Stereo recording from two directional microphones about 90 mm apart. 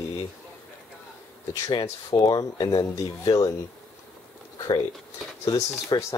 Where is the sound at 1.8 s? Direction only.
40° left (ahead or behind).